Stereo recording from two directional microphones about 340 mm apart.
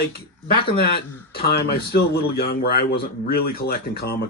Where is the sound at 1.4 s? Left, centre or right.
Left.